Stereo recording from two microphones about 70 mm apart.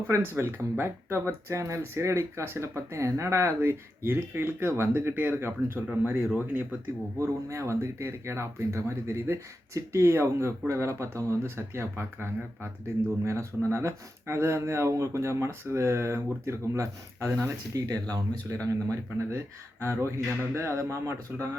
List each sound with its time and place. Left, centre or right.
0.2 s speech: right
7.2 s speech: right
13.7 s speech: right
18.1 s speech: right
18.5 s speech: right